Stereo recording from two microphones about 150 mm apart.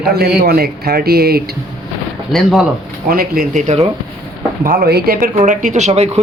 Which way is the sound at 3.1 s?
75° right (ahead or behind).